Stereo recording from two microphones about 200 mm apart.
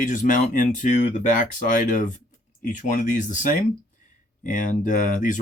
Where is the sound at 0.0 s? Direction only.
40° left (ahead or behind).